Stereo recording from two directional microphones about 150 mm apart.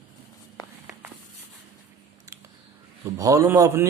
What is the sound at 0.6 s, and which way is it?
Walk, 25° left (ahead or behind).